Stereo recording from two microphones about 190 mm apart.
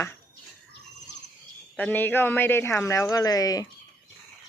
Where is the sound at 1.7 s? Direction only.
10° left (ahead or behind).